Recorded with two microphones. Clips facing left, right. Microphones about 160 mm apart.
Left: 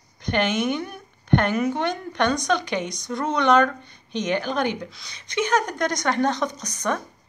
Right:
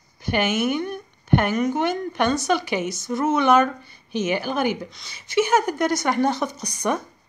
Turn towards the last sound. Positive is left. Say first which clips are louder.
# right 2 dB
turn(degrees=-10)  # may be behind; listen again after turning